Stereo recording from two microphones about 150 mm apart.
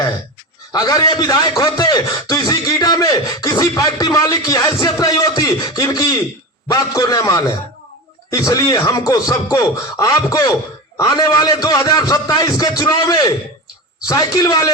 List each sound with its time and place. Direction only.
0.7 s a man's voice: 25° left (ahead or behind)